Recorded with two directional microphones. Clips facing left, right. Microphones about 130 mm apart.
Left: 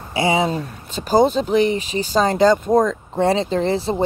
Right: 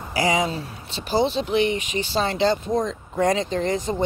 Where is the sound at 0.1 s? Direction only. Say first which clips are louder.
Left 3 dB; 30° left (ahead or behind).